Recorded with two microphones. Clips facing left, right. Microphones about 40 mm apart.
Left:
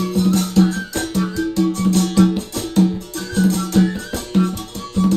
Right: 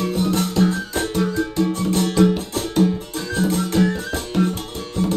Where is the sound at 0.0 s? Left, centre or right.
Right.